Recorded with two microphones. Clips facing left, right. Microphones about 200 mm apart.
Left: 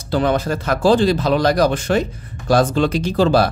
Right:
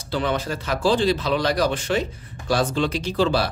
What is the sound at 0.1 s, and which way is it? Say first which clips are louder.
A man's voice: left 6 dB; 45° left (ahead or behind).